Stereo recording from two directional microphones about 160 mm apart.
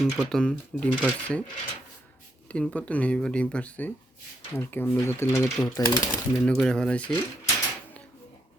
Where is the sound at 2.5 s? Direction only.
10° left (ahead or behind).